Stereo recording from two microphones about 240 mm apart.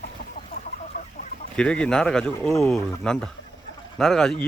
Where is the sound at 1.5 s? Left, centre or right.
Centre.